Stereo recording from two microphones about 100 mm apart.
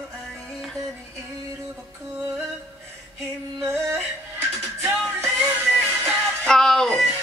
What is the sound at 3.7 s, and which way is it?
Music, 25° right (ahead or behind).